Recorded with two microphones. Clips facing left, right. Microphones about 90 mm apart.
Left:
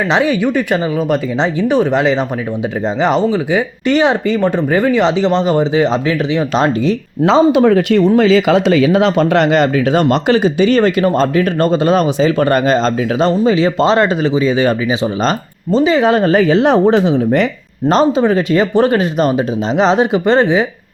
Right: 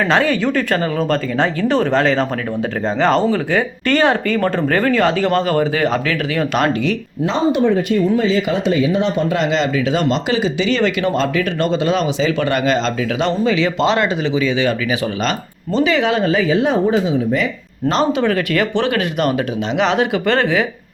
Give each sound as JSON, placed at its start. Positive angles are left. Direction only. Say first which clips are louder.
{"t": 0.1, "sound": "speech", "louder": "left 2 dB", "side_deg": 15}
{"t": 7.3, "sound": "speech", "louder": "left 6 dB", "side_deg": 90}
{"t": 17.8, "sound": "speech", "louder": "left 5 dB", "side_deg": 35}